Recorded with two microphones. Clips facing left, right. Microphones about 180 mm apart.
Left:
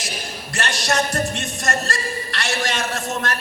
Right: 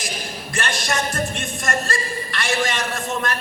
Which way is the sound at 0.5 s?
40° left (ahead or behind).